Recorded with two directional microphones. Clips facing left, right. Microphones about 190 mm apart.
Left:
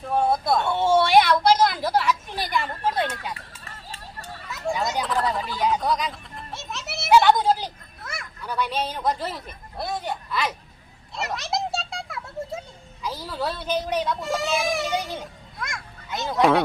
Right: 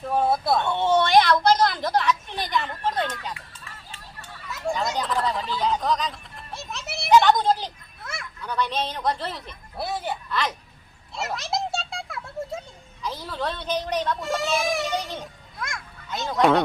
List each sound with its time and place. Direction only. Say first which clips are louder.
0.0 s speech: even; 5° right (ahead or behind)
0.6 s a woman's voice: left 1 dB; 10° left (ahead or behind)
3.3 s run: left 2 dB; 40° left (ahead or behind)
4.7 s a woman's voice: left 1 dB; 5° left (ahead or behind)
6.3 s children playing: left 1 dB; centre (ahead or behind)
9.7 s a child's voice: even; 5° right (ahead or behind)